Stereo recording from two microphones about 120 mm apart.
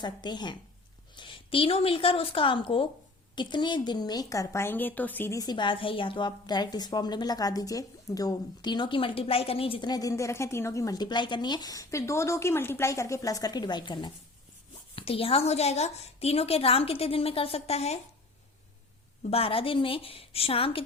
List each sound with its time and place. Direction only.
0.0 s a woman's voice: 35° left (ahead or behind); by 5.3 s 15° left (ahead or behind)
5.3 s a woman's voice: 35° left (ahead or behind); by 9.9 s 50° left (ahead or behind)
9.9 s a woman's voice: 30° left (ahead or behind)
14.9 s a woman's voice: 50° left (ahead or behind)
19.3 s a woman's voice: 50° left (ahead or behind)